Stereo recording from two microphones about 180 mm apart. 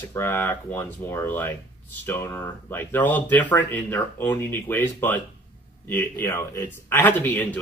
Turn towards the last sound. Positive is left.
turn(degrees=10)  # may be behind; listen again after turning